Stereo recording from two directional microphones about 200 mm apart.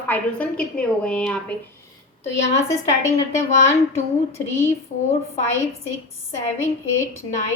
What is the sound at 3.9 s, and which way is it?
Speech, 10° left (ahead or behind).